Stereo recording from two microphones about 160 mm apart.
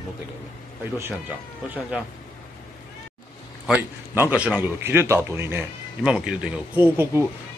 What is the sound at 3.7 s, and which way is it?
A man's voice, 10° right (ahead or behind).